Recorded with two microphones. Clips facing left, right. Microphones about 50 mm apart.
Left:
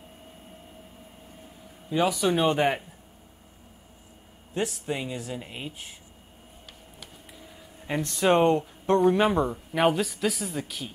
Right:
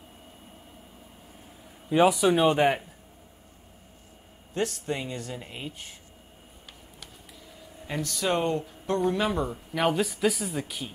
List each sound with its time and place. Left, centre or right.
1.9 s a man's voice: centre
2.1 s speech: centre
4.6 s speech: centre
7.4 s a sound: centre
8.0 s speech: left
9.8 s speech: centre